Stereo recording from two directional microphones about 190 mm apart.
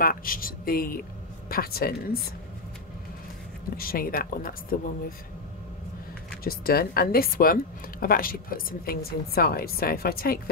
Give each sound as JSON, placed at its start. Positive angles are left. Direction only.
{"t": 0.0, "sound": "a woman's voice", "side_deg": 50}
{"t": 3.7, "sound": "a woman's voice", "side_deg": 50}
{"t": 6.4, "sound": "a woman's voice", "side_deg": 50}